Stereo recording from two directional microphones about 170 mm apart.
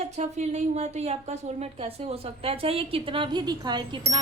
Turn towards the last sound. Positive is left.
turn(degrees=-25)  # may be behind; listen again after turning